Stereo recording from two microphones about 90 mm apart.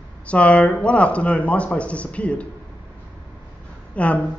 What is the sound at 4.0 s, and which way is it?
Speech, 15° left (ahead or behind).